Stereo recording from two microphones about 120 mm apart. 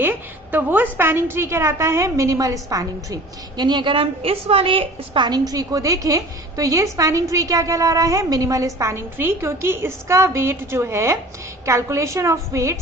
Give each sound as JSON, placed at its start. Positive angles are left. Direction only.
{"t": 0.0, "sound": "a woman's voice", "side_deg": -15}
{"t": 3.6, "sound": "a woman's voice", "side_deg": -40}